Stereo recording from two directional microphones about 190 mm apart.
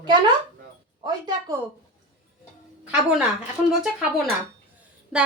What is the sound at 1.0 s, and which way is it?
Speech, 20° right (ahead or behind).